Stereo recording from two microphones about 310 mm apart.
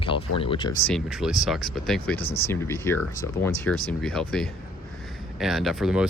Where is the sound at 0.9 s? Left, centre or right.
Centre.